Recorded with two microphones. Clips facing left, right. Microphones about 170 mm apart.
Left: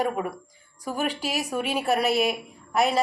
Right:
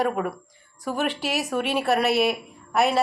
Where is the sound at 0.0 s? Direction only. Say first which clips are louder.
Right 2 dB; centre (ahead or behind).